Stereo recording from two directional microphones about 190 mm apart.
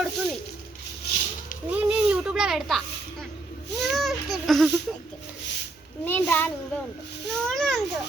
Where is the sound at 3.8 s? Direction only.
Centre (ahead or behind).